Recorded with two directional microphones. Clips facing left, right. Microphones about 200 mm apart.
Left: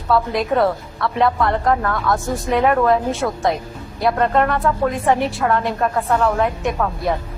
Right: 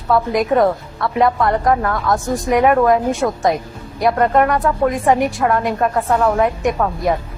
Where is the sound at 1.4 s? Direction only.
5° right (ahead or behind).